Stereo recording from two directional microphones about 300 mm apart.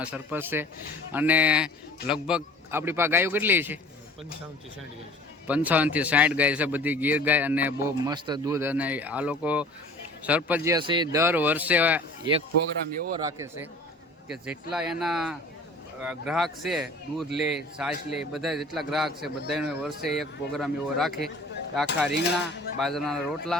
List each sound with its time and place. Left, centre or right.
0.0 s a man's voice: centre
5.5 s a man's voice: centre
22.1 s a sound: left
22.8 s a man's voice: centre